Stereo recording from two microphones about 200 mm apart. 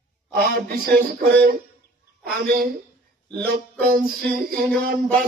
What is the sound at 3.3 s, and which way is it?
Speech, 50° right (ahead or behind).